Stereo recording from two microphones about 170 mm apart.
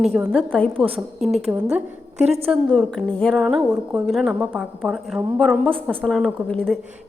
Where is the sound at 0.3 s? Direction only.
5° left (ahead or behind).